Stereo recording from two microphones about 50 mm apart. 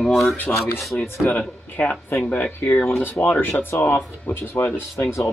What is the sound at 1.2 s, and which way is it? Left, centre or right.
Speech, left.